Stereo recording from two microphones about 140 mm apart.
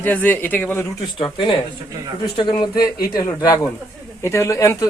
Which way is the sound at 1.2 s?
35° left (ahead or behind).